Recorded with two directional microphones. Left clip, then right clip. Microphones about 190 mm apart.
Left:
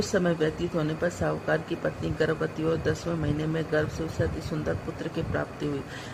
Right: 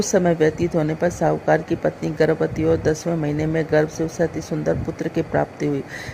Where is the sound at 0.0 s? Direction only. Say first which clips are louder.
Right 8 dB; 30° right (ahead or behind).